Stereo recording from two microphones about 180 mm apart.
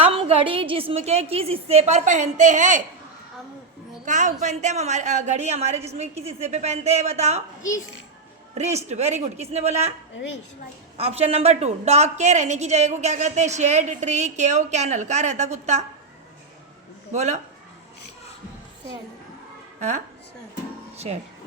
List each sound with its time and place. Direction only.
0.0 s a woman's voice: 30° right (ahead or behind)
4.0 s a woman's voice: 40° right (ahead or behind)
8.5 s a woman's voice: 40° right (ahead or behind)
10.9 s a woman's voice: 35° right (ahead or behind)
17.1 s a woman's voice: 40° right (ahead or behind)
20.9 s music: 35° right (ahead or behind)